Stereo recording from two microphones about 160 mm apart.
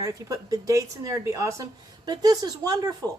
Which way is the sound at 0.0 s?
20° right (ahead or behind).